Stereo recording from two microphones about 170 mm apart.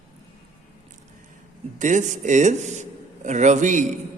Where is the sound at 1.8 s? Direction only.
45° right (ahead or behind).